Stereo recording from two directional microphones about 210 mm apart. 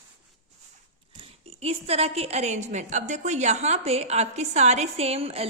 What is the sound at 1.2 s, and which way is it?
A woman's voice, 30° right (ahead or behind).